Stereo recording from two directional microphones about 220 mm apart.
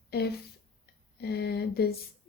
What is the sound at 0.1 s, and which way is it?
A woman's voice, 45° left (ahead or behind).